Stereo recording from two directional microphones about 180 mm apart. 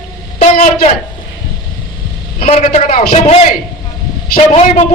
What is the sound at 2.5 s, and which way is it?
Speech, 35° left (ahead or behind).